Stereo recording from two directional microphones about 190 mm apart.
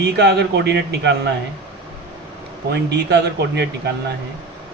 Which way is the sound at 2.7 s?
60° right (ahead or behind).